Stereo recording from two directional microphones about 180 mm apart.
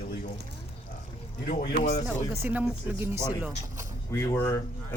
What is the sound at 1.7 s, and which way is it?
Speech, 35° left (ahead or behind).